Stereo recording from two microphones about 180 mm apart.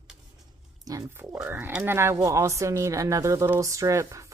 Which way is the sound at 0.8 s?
20° right (ahead or behind).